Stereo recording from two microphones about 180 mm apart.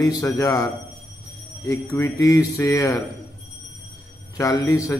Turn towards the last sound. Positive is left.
turn(degrees=20)  # may be behind; listen again after turning